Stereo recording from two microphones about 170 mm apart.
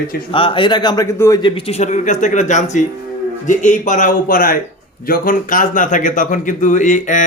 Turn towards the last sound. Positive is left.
turn(degrees=45)  # may be behind; listen again after turning